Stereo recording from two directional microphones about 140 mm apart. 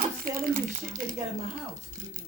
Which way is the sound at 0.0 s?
90° right.